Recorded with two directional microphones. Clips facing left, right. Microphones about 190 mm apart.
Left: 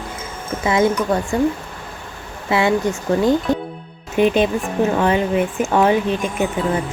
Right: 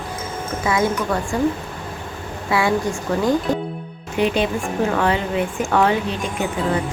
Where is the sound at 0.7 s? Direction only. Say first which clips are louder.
Left 4 dB; 25° left (ahead or behind).